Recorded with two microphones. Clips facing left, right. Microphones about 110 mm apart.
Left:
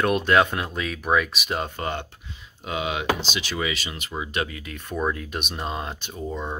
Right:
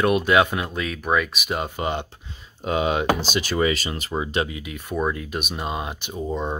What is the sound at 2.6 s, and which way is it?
Speech, 40° right (ahead or behind).